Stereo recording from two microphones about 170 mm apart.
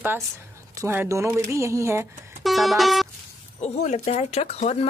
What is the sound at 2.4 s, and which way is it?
Music, centre (ahead or behind).